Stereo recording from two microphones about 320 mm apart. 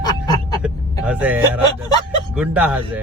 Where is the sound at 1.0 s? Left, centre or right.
Centre.